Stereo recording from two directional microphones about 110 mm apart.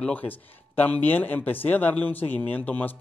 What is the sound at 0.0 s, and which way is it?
Speech, 15° left (ahead or behind).